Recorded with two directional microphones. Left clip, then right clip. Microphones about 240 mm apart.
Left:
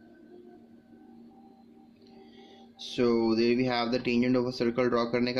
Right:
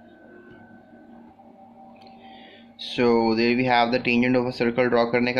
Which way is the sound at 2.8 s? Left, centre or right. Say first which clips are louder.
Right 6 dB; centre.